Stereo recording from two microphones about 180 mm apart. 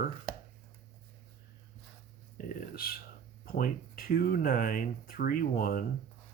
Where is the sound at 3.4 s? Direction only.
55° left (ahead or behind).